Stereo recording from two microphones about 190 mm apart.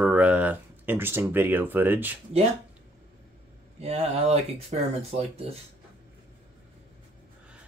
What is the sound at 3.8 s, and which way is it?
Speech, 35° right (ahead or behind).